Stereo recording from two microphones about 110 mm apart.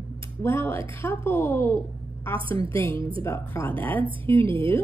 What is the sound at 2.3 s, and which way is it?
Speech, 50° right (ahead or behind).